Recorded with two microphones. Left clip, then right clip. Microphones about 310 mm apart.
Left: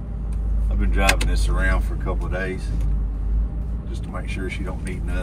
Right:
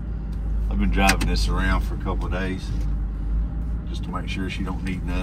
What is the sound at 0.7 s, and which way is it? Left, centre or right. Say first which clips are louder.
Speech: even; right.